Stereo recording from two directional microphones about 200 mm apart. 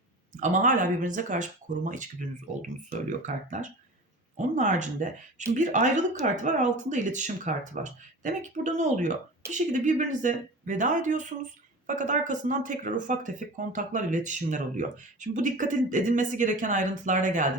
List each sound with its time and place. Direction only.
0.3 s speech: 40° right (ahead or behind)
3.1 s speech: 35° right (ahead or behind)